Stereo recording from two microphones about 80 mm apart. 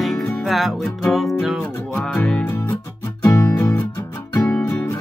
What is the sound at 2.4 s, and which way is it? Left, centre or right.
Music, left.